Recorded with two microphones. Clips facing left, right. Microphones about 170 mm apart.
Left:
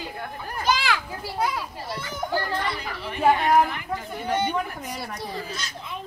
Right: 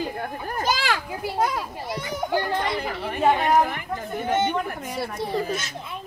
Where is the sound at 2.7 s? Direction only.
50° right (ahead or behind).